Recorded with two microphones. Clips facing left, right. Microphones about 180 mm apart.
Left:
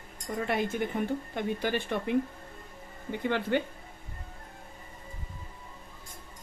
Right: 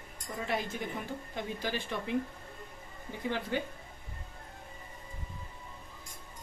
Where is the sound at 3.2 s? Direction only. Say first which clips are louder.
Left 5 dB; 65° left (ahead or behind).